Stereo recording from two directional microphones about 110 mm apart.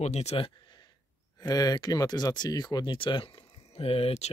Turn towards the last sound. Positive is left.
turn(degrees=70)  # may be behind; listen again after turning